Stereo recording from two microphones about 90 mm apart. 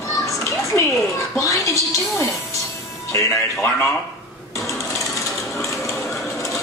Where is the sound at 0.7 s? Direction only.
25° left (ahead or behind).